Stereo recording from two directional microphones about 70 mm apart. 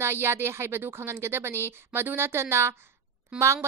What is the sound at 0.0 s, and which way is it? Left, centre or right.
Speech, right.